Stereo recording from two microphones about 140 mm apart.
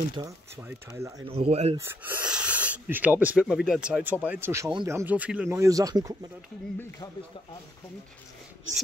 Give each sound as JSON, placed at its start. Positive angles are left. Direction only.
{"t": 0.2, "sound": "speech", "side_deg": -30}
{"t": 0.6, "sound": "speech", "side_deg": -15}
{"t": 1.3, "sound": "speech", "side_deg": -45}
{"t": 1.8, "sound": "speech", "side_deg": -15}
{"t": 5.6, "sound": "speech", "side_deg": -25}